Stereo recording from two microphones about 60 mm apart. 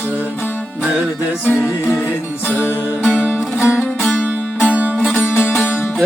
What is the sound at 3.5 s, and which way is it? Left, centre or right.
Music, left.